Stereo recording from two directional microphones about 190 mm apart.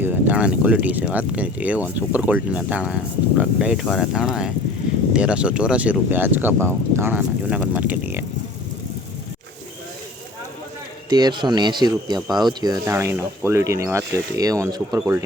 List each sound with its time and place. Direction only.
0.0 s speech: 10° right (ahead or behind)
11.1 s speech: 20° right (ahead or behind)